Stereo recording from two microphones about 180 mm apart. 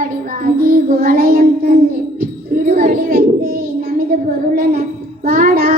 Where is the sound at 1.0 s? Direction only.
55° right (ahead or behind).